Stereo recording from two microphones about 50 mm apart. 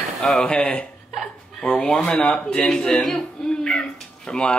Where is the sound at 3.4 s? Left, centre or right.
Centre.